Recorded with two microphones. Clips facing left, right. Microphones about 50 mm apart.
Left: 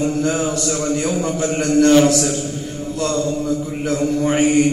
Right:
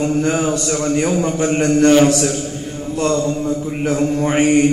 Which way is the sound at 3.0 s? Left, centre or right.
Right.